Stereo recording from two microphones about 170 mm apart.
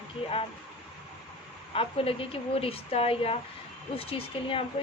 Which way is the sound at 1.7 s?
35° left (ahead or behind).